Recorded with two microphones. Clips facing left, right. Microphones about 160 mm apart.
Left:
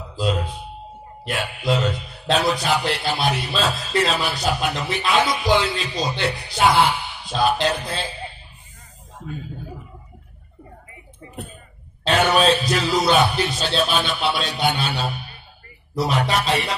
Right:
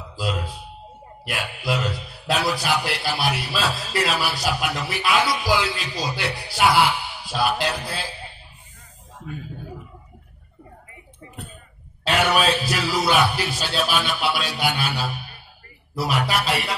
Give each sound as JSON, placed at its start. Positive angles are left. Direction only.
{"t": 0.1, "sound": "a sound", "side_deg": 25}
{"t": 1.2, "sound": "a man's voice", "side_deg": 25}
{"t": 12.1, "sound": "music", "side_deg": 35}
{"t": 12.7, "sound": "a man's voice", "side_deg": 25}
{"t": 16.1, "sound": "music", "side_deg": 30}